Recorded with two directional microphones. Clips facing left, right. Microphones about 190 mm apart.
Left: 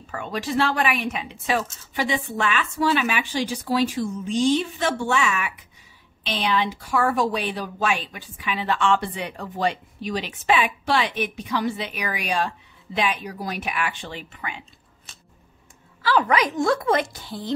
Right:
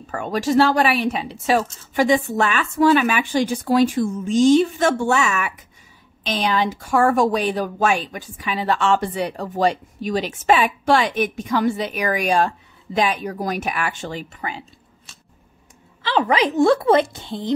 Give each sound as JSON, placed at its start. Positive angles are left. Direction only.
{"t": 0.1, "sound": "speech", "side_deg": -45}
{"t": 16.0, "sound": "speech", "side_deg": -25}